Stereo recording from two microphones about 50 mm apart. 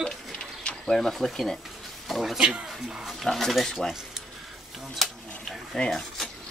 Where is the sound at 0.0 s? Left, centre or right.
Centre.